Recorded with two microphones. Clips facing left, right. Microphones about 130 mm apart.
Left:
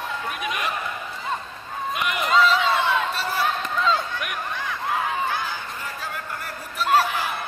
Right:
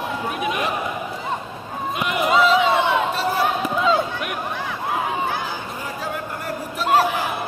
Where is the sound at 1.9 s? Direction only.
20° right (ahead or behind).